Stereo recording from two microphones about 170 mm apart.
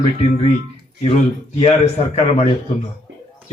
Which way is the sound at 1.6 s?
35° left (ahead or behind).